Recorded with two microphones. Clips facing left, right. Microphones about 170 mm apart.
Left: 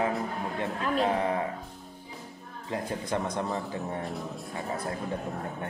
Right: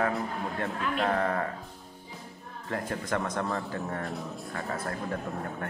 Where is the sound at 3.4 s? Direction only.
20° left (ahead or behind).